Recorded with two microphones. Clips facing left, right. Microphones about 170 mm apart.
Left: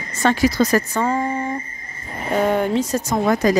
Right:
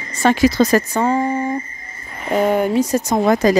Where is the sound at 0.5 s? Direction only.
25° right (ahead or behind).